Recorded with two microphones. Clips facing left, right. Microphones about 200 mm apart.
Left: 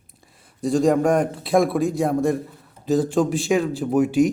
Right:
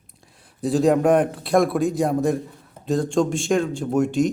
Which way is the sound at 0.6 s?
Centre (ahead or behind).